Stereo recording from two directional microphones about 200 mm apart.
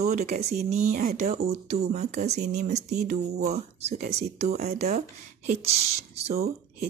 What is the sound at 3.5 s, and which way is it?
Speech, 35° right (ahead or behind).